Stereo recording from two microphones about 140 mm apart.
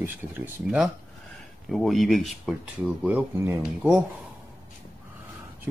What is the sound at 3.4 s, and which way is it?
Speech, 20° right (ahead or behind).